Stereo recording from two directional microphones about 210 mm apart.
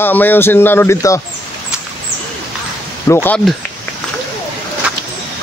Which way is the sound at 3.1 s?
10° left (ahead or behind).